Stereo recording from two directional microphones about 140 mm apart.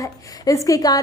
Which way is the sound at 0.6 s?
25° left (ahead or behind).